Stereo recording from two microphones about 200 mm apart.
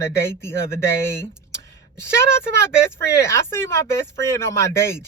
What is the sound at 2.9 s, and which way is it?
Speech, 15° left (ahead or behind).